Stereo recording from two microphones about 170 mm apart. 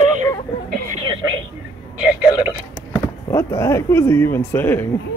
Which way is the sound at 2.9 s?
15° left (ahead or behind).